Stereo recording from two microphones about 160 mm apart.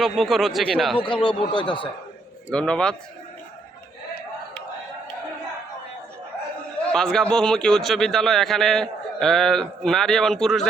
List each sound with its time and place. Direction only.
0.0 s a man's voice: centre (ahead or behind)
1.0 s speech: 30° left (ahead or behind)
2.5 s a man's voice: 5° left (ahead or behind)
6.9 s a man's voice: 5° left (ahead or behind)